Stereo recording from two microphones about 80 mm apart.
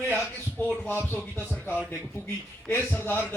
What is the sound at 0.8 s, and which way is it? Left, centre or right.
Speech, left.